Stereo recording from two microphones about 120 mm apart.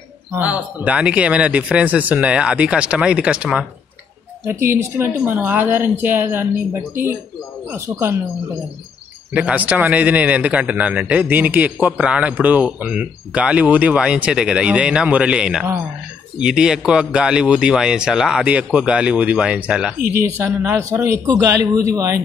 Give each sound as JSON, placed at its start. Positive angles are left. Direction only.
{"t": 0.3, "sound": "a man's voice", "side_deg": -10}
{"t": 4.5, "sound": "a man's voice", "side_deg": -20}
{"t": 9.3, "sound": "a man's voice", "side_deg": -10}
{"t": 20.2, "sound": "a man's voice", "side_deg": -20}